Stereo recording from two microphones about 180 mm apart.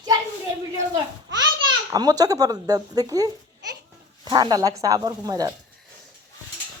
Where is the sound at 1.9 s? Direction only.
20° right (ahead or behind).